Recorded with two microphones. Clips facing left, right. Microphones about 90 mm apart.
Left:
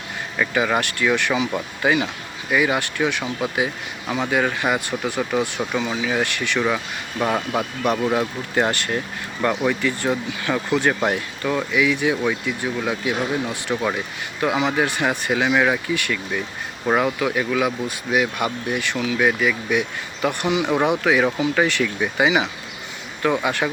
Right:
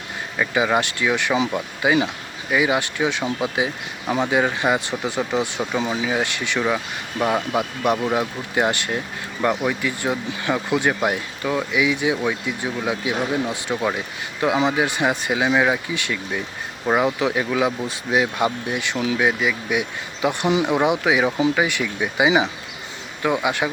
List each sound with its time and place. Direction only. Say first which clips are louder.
0.3 s speech: right 1 dB; 15° right (ahead or behind)
16.0 s speech: left 1 dB; 20° right (ahead or behind)